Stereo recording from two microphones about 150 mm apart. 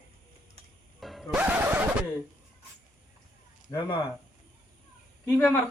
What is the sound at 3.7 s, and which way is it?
Speech, 25° left (ahead or behind).